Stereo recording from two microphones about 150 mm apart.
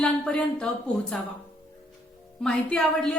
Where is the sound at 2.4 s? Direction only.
5° left (ahead or behind).